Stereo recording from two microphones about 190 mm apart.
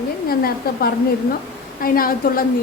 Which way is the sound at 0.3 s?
55° left (ahead or behind).